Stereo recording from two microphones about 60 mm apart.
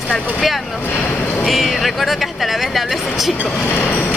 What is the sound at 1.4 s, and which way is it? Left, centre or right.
Speech, centre.